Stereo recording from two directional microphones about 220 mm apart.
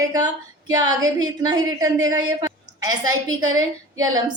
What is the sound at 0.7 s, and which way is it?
A woman's voice, 15° right (ahead or behind).